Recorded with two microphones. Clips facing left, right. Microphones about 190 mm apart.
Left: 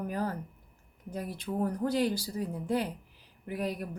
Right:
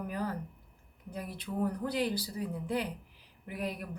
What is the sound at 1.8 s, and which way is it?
Speech, 45° left (ahead or behind).